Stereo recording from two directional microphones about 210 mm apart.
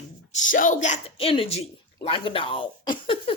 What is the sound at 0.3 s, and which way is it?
A woman's voice, 35° left (ahead or behind).